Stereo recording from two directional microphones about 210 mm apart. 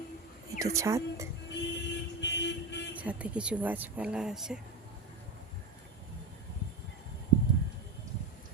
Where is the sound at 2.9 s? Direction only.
5° right (ahead or behind).